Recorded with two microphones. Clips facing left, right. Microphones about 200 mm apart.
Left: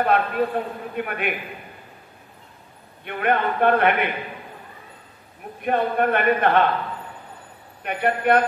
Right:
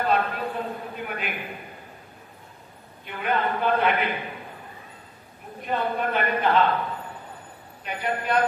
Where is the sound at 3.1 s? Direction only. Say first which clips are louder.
Left 4 dB; 60° left (ahead or behind).